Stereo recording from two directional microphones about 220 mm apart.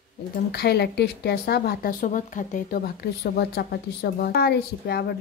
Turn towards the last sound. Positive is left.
turn(degrees=45)  # may be behind; listen again after turning